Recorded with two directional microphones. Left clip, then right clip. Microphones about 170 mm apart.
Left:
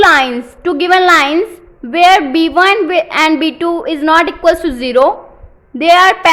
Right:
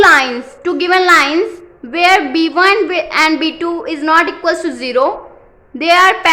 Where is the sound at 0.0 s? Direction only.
35° left (ahead or behind).